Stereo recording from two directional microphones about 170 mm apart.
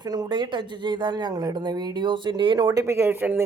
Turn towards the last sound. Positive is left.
turn(degrees=-10)  # may be behind; listen again after turning